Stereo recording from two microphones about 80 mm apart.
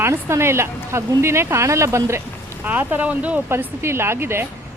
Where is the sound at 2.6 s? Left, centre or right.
Right.